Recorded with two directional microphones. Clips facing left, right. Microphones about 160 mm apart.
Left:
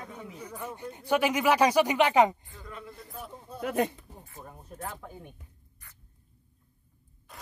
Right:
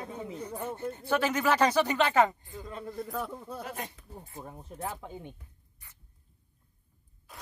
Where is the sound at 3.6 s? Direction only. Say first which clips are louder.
Left 16 dB; 65° left (ahead or behind).